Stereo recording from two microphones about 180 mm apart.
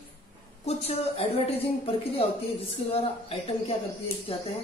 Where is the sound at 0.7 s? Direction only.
35° left (ahead or behind).